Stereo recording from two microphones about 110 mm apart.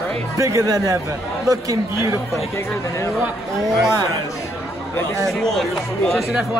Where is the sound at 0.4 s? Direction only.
30° right (ahead or behind).